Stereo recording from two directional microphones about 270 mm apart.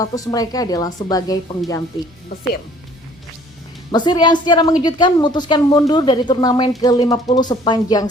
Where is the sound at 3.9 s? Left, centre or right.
Centre.